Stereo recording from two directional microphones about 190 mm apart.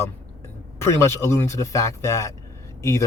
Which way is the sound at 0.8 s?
15° left (ahead or behind).